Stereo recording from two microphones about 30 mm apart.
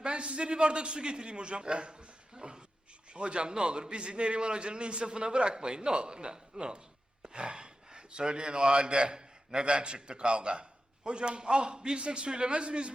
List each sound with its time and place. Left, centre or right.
0.0 s a man's voice: right